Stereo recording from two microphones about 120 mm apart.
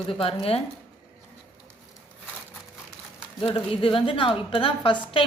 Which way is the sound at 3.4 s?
50° left (ahead or behind).